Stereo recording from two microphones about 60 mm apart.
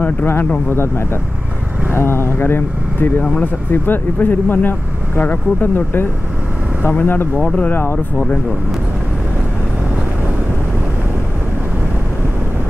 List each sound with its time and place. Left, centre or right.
0.0 s speech: left
1.9 s speech: left